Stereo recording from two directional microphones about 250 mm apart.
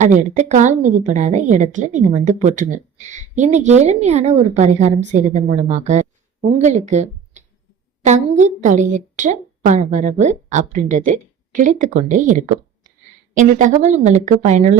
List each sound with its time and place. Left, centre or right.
0.0 s a woman's voice: right